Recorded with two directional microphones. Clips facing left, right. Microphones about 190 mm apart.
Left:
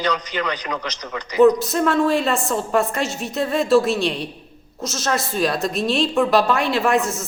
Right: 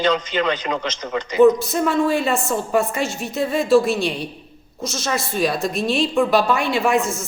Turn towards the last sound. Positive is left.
turn(degrees=0)  # may be behind; listen again after turning